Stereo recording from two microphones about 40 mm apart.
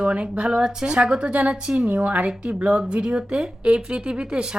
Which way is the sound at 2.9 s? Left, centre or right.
Right.